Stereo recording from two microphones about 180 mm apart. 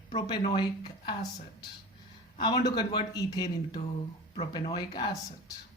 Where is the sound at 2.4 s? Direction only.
25° left (ahead or behind).